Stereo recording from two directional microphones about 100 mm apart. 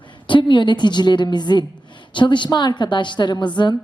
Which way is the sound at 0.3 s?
55° left (ahead or behind).